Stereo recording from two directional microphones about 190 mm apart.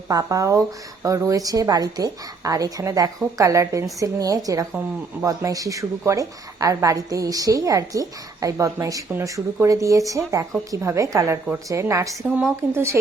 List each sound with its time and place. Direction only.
0.1 s a woman's voice: 20° right (ahead or behind)